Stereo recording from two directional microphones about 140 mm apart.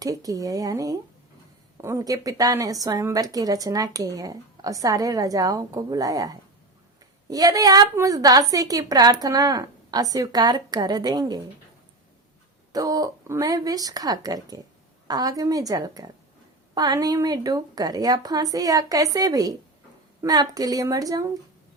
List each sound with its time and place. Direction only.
0.0 s a woman's voice: 25° right (ahead or behind)
12.7 s a woman's voice: 25° right (ahead or behind)